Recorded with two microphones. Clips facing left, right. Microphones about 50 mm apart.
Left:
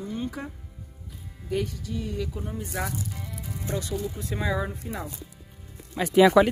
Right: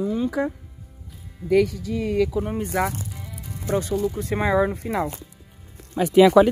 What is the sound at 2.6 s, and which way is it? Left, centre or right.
Speech, right.